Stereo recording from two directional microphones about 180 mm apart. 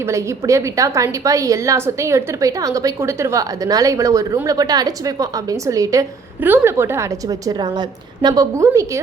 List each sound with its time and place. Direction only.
0.0 s a woman's voice: 15° right (ahead or behind)